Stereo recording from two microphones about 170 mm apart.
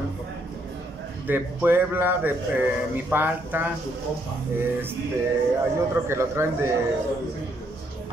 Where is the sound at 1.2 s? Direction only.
10° right (ahead or behind).